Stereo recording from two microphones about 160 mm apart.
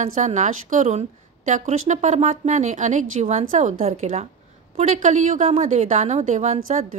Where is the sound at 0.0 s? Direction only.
50° right (ahead or behind).